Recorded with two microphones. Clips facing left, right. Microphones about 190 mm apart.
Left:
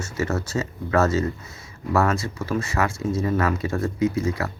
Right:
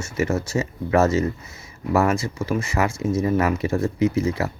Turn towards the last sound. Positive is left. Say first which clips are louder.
# right 2 dB
turn(degrees=-20)  # may be behind; listen again after turning